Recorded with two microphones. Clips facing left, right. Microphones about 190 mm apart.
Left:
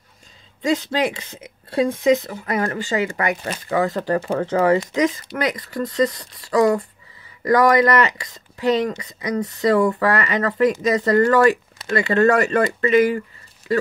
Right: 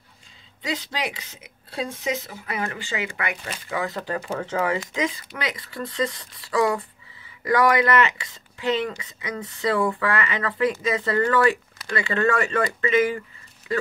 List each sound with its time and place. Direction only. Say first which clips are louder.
0.6 s speech: left 9 dB; 45° left (ahead or behind)